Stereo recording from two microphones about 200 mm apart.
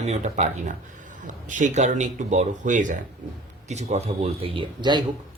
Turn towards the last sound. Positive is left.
turn(degrees=-20)  # may be behind; listen again after turning